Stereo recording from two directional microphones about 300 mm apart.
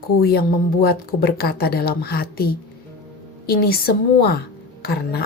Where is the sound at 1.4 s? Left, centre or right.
Left.